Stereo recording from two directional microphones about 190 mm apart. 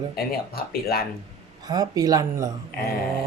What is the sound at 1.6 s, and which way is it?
Speech, 20° right (ahead or behind).